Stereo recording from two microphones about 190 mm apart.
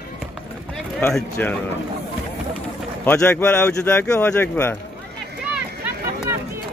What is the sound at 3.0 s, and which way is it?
Speech, 10° left (ahead or behind).